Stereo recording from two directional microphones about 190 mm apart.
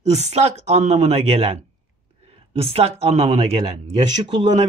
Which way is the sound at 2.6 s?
30° right (ahead or behind).